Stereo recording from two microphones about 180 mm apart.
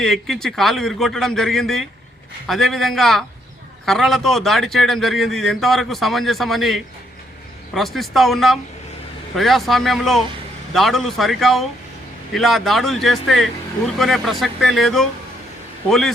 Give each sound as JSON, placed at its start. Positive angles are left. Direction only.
{"t": 0.0, "sound": "a man's voice", "side_deg": 0}